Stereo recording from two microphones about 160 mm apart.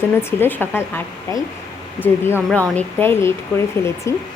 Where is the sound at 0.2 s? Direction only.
15° left (ahead or behind).